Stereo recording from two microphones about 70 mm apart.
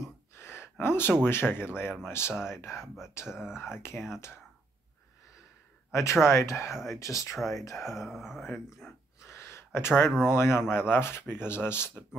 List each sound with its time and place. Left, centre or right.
0.4 s speech: left
3.3 s speech: centre
3.6 s speech: left
5.9 s a sound: left
6.2 s speech: left
7.7 s speech: centre
9.2 s a sound: left
10.2 s speech: left